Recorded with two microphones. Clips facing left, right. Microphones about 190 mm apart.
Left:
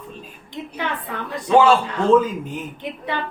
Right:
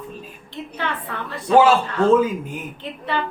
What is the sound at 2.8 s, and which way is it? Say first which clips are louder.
Speech: right 3 dB; 15° left (ahead or behind).